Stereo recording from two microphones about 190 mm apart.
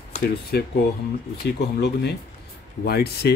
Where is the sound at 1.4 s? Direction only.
60° left (ahead or behind).